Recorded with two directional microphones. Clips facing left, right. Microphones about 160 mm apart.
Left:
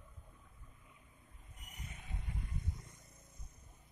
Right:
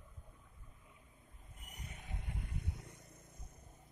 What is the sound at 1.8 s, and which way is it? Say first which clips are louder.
Vehicle: even; 65° right (ahead or behind).